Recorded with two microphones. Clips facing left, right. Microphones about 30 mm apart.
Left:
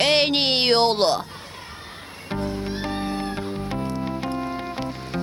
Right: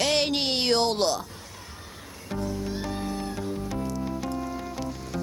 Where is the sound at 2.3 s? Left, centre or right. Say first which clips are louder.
Left 3 dB; left.